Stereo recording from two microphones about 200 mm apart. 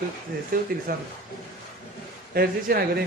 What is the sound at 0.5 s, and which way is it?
Speech, 45° right (ahead or behind).